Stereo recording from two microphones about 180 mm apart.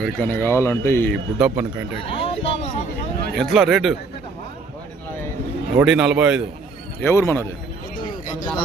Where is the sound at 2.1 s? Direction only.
30° left (ahead or behind).